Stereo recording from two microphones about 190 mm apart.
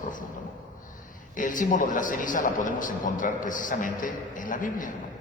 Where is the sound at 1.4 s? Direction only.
45° left (ahead or behind).